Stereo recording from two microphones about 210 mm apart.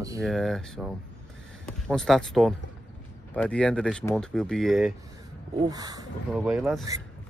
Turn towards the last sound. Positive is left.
turn(degrees=-5)  # may be behind; listen again after turning